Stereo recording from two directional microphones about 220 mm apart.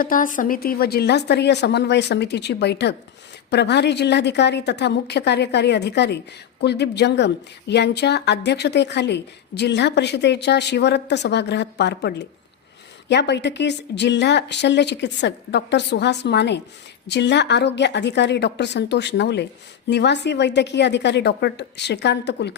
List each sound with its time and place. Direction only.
0.0 s a woman's voice: 40° left (ahead or behind)